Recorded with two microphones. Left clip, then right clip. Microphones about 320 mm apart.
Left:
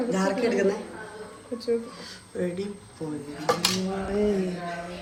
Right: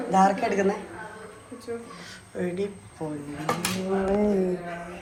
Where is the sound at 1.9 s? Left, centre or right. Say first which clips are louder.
Left 1 dB; centre.